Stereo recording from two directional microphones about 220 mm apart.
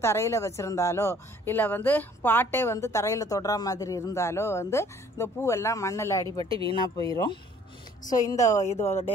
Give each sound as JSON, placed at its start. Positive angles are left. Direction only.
{"t": 0.0, "sound": "speech", "side_deg": 10}